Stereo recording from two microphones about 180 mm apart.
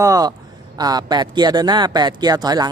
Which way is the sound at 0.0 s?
20° right (ahead or behind).